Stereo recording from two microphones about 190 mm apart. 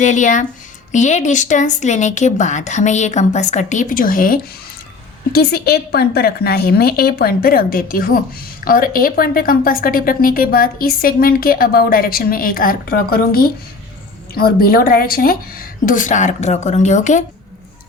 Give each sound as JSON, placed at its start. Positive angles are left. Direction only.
{"t": 0.0, "sound": "a woman's voice", "side_deg": 40}